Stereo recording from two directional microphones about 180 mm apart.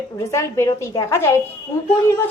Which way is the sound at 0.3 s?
15° left (ahead or behind).